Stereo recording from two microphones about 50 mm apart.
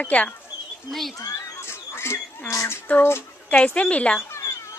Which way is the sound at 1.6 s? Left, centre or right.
Left.